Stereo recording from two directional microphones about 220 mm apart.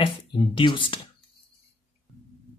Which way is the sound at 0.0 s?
25° left (ahead or behind).